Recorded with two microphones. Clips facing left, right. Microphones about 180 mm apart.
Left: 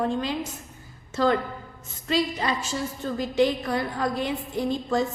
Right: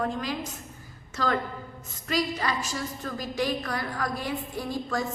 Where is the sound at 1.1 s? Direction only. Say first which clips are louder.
Left 5 dB; 25° left (ahead or behind).